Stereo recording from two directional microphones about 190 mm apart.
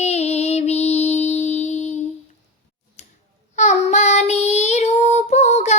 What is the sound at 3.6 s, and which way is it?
Child singing, 35° left (ahead or behind).